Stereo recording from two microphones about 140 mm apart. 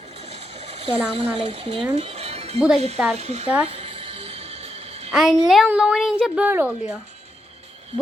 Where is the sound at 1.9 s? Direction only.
50° right (ahead or behind).